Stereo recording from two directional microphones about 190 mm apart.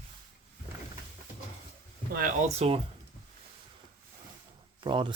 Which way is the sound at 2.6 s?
30° right (ahead or behind).